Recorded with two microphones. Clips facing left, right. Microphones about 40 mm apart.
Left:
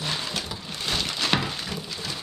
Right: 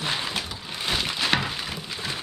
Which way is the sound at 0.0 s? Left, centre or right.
Right.